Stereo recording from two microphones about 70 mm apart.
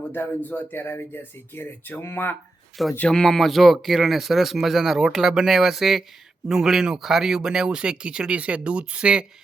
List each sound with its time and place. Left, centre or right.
0.1 s speech: left
3.1 s speech: centre